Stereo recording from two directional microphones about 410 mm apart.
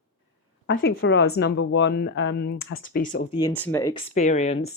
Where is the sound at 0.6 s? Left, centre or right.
Left.